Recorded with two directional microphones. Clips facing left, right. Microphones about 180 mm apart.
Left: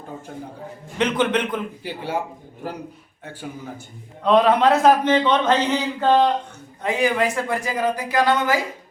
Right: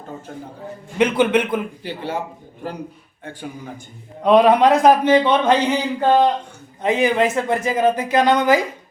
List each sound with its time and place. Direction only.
0.3 s a man's voice: 5° left (ahead or behind)
0.9 s a man's voice: 10° right (ahead or behind)
1.8 s speech: 10° left (ahead or behind)
4.2 s a man's voice: 15° right (ahead or behind)